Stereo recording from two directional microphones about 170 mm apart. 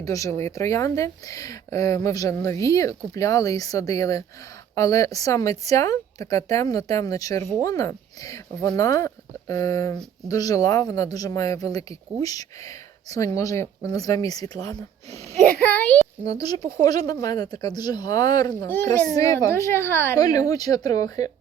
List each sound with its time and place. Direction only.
0.0 s speech: 20° left (ahead or behind)
15.5 s a sound: 10° left (ahead or behind)
16.2 s speech: 20° left (ahead or behind)
18.7 s a child's voice: 10° left (ahead or behind)